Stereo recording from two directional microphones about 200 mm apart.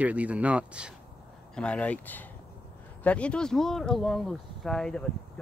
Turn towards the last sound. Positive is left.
turn(degrees=5)  # may be behind; listen again after turning